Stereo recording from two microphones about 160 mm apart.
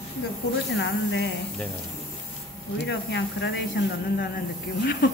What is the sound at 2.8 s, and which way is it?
Speech, 90° left.